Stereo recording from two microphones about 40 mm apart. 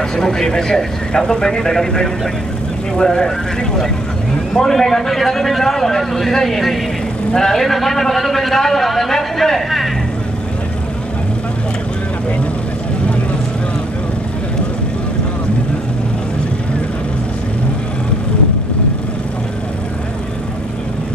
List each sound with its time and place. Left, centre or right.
0.1 s a man's voice: centre